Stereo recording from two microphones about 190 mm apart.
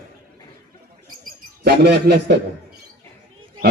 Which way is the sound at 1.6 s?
60° right (ahead or behind).